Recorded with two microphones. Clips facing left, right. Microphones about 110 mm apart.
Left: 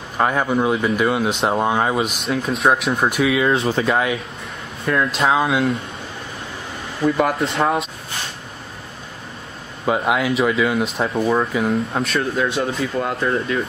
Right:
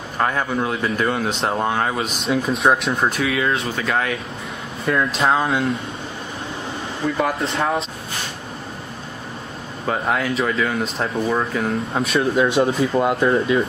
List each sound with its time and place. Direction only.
0.2 s speech: 15° left (ahead or behind)
2.2 s speech: centre (ahead or behind)
3.1 s speech: 15° left (ahead or behind)
3.5 s speech: 30° left (ahead or behind)
3.9 s speech: 10° left (ahead or behind)
4.8 s speech: centre (ahead or behind)
7.0 s speech: 5° left (ahead or behind)
9.8 s speech: 10° left (ahead or behind)
12.4 s speech: 15° right (ahead or behind)
13.0 s speech: 25° right (ahead or behind)